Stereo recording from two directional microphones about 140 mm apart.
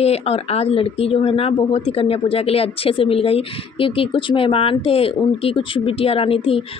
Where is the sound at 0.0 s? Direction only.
45° left (ahead or behind).